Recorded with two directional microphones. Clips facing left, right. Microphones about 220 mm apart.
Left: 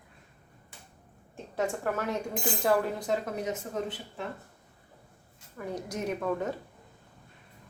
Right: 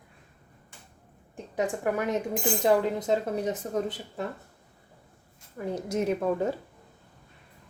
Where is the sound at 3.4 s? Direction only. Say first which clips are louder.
Right 4 dB; 35° right (ahead or behind).